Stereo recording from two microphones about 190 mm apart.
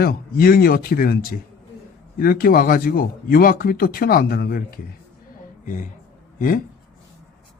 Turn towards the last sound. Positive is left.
turn(degrees=45)  # may be behind; listen again after turning